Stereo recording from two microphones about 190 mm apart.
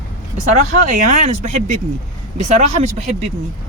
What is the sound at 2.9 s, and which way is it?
Speech, 35° right (ahead or behind).